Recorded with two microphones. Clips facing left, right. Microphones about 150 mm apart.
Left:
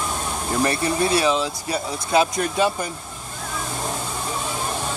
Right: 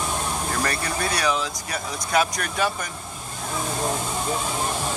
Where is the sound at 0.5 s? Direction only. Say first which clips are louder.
Left 9 dB; 25° left (ahead or behind).